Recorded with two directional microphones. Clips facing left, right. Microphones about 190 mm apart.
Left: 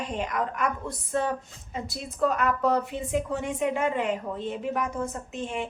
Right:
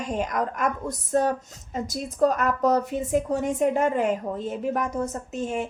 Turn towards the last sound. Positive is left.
turn(degrees=-40)  # may be behind; listen again after turning